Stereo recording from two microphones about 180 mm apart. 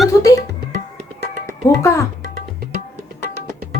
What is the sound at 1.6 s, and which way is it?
Speech, 15° left (ahead or behind).